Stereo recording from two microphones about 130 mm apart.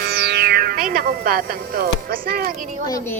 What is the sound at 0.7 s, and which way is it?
Speech, 90° right.